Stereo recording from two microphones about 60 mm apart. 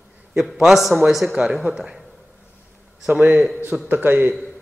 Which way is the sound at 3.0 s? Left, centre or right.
Centre.